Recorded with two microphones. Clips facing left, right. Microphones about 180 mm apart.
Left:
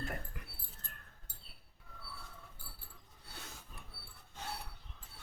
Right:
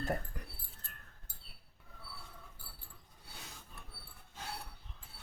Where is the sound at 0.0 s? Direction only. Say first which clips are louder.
Right 6 dB; 40° right (ahead or behind).